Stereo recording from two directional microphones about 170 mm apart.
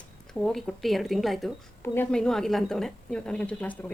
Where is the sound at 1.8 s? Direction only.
10° left (ahead or behind).